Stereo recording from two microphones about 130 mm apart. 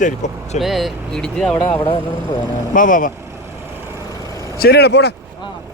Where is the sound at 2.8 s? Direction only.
90° left.